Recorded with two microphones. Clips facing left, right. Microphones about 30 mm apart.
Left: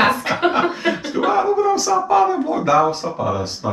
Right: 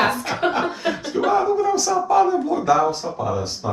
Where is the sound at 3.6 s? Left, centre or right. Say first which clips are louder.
Left 2 dB; left.